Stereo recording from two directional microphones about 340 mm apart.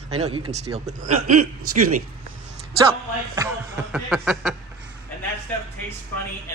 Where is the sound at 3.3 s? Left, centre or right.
Centre.